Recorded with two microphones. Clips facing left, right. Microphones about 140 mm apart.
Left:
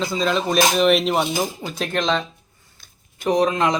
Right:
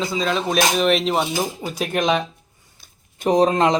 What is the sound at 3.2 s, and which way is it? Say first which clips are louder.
Speech: right 2 dB; 25° right (ahead or behind).